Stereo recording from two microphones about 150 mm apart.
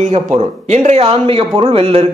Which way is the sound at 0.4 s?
50° right (ahead or behind).